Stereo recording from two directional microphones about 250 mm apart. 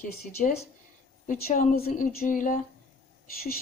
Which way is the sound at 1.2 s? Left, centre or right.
Left.